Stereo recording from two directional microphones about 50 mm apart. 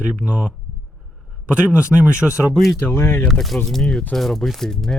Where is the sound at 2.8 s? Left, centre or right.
Left.